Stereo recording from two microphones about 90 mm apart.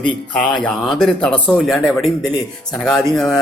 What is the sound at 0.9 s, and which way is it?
Speech, 5° left (ahead or behind).